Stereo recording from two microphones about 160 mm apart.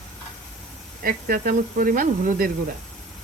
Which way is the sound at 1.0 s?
60° right (ahead or behind).